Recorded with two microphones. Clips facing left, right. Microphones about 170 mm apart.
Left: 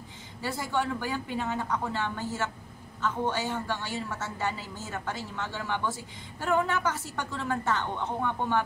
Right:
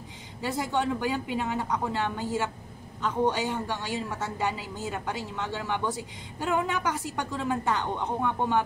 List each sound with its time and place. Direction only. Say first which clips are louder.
0.4 s a woman's voice: right 2 dB; 20° right (ahead or behind)